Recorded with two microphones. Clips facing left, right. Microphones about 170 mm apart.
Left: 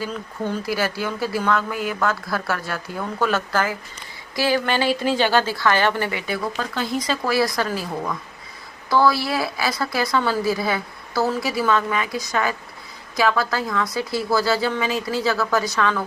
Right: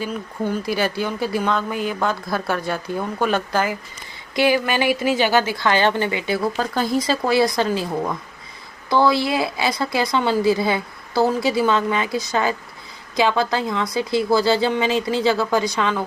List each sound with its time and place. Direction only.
0.0 s a woman's voice: 15° right (ahead or behind)
6.2 s speech: 35° right (ahead or behind)
7.0 s speech: 25° right (ahead or behind)